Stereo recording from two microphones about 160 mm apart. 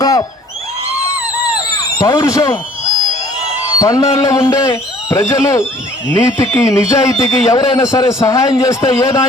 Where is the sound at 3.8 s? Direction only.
20° left (ahead or behind).